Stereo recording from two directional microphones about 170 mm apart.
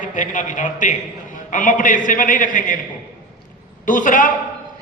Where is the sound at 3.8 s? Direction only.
50° left (ahead or behind).